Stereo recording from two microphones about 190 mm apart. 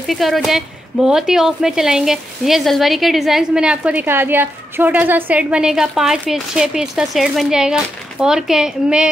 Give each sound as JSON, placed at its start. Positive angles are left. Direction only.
{"t": 0.0, "sound": "speech", "side_deg": 0}